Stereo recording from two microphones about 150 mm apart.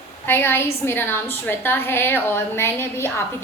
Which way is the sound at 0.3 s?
15° left (ahead or behind).